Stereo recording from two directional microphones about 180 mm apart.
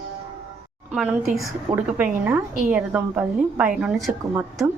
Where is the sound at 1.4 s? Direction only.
10° right (ahead or behind).